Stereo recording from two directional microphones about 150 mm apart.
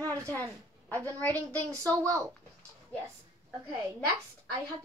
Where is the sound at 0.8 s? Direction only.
10° left (ahead or behind).